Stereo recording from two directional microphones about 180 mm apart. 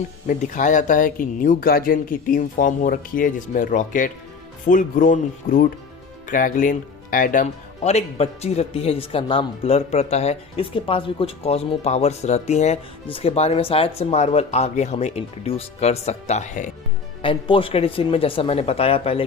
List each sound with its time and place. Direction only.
0.3 s speech: 45° left (ahead or behind)
17.2 s speech: 30° left (ahead or behind)